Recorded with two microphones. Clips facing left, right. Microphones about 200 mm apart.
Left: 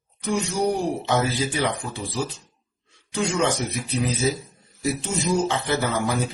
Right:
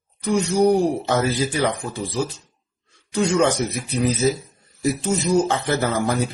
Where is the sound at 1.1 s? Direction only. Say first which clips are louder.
Right 2 dB; 40° right (ahead or behind).